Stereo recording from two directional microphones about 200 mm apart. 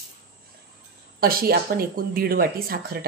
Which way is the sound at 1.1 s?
50° right (ahead or behind).